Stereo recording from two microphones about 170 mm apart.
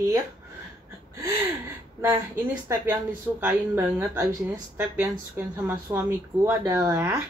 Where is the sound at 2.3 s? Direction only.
15° right (ahead or behind).